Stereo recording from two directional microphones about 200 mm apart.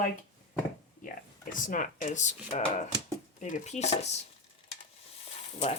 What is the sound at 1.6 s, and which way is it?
Speech, 40° left (ahead or behind).